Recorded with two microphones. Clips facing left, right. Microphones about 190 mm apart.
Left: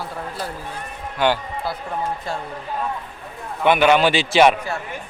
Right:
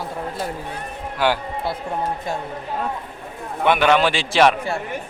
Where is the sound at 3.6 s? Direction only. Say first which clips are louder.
Left 1 dB; centre (ahead or behind).